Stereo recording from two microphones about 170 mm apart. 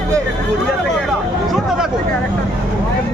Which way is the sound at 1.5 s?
5° right (ahead or behind).